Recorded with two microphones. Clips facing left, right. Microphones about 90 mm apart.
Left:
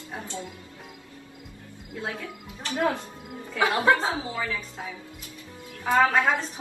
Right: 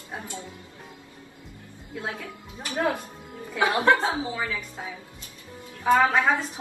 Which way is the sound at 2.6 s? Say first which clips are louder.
Even; 25° right (ahead or behind).